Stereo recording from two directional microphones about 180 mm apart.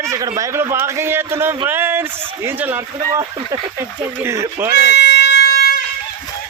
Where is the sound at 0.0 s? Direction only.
20° right (ahead or behind).